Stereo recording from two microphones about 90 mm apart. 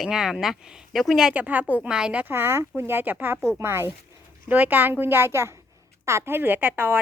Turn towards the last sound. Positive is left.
turn(degrees=-20)  # may be behind; listen again after turning